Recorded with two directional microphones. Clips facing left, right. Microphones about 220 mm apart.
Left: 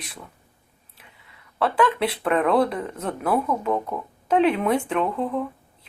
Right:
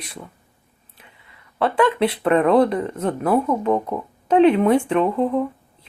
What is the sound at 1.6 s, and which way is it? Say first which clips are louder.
Speech: right 3 dB; centre (ahead or behind).